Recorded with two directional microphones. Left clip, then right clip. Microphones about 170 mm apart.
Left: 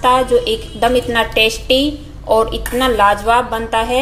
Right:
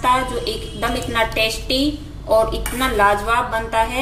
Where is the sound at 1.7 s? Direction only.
30° left (ahead or behind).